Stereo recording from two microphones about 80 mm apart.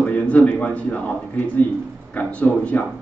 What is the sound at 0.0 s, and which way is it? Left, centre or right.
A man's voice, centre.